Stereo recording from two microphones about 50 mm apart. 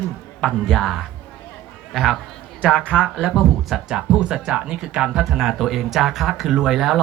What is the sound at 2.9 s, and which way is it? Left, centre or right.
Speech, centre.